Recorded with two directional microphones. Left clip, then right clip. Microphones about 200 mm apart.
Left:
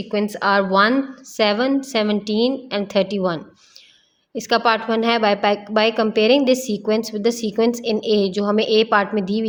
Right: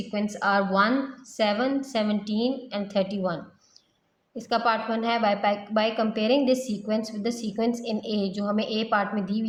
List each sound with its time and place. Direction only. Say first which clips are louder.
0.1 s a woman's voice: left 6 dB; 55° left (ahead or behind)